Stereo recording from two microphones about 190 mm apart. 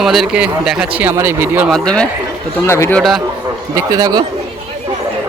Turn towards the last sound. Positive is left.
turn(degrees=-20)  # may be behind; listen again after turning